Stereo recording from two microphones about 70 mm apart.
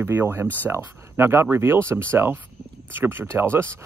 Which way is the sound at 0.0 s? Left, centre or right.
Right.